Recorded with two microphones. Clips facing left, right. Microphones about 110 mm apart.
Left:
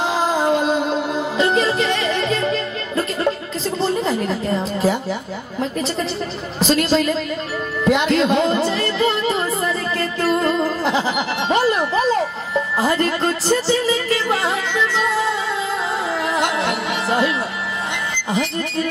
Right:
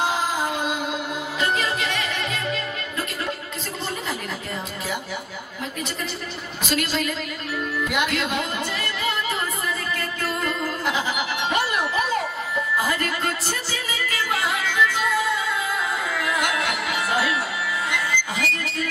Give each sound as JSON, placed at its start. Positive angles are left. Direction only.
{"t": 0.0, "sound": "music", "side_deg": 30}
{"t": 3.8, "sound": "a sound", "side_deg": 35}
{"t": 6.6, "sound": "speech", "side_deg": 30}
{"t": 16.2, "sound": "music", "side_deg": 25}